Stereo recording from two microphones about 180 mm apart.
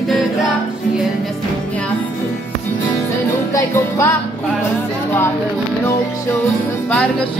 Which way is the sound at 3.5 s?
15° left (ahead or behind).